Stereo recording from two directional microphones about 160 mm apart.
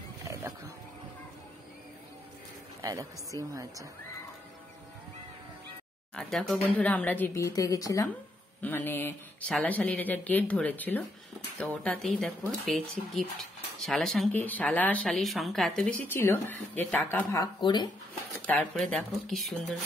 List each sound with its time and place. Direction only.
0.3 s wild animals: 20° right (ahead or behind)
2.8 s a woman's voice: 20° right (ahead or behind)
6.1 s speech: 5° left (ahead or behind)
17.6 s speech: 30° left (ahead or behind)
18.4 s speech: 5° left (ahead or behind)